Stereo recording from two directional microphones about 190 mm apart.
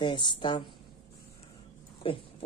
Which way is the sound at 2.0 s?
30° left (ahead or behind).